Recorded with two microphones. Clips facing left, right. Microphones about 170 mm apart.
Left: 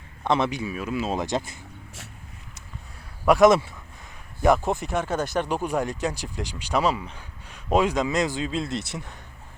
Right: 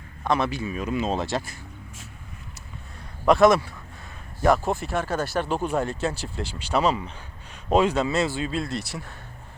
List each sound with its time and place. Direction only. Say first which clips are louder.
0.3 s speech: left 1 dB; 20° left (ahead or behind); by 1.2 s 5° left (ahead or behind)
1.2 s speech: left 1 dB; 20° left (ahead or behind)
3.2 s speech: left 1 dB; 10° left (ahead or behind)